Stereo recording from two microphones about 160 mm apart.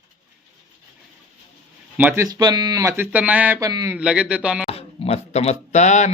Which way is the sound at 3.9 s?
5° right (ahead or behind).